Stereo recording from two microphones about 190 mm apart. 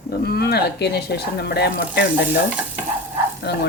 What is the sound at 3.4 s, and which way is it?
Speech, 60° left (ahead or behind).